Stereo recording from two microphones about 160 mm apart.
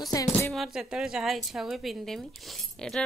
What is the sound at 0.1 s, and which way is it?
Speech, 20° left (ahead or behind).